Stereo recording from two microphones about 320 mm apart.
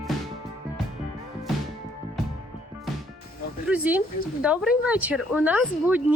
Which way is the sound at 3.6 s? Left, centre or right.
Centre.